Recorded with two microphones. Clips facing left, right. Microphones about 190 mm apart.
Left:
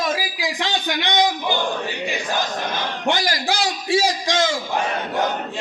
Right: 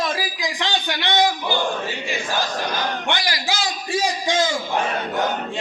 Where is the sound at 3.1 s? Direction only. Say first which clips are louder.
Left 3 dB; 45° left (ahead or behind); by 4.4 s 90° left.